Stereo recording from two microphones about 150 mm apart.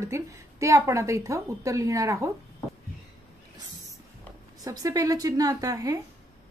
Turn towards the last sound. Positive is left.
turn(degrees=-25)  # may be behind; listen again after turning